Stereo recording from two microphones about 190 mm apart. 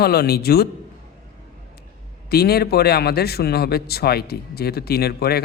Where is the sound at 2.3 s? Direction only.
55° left (ahead or behind).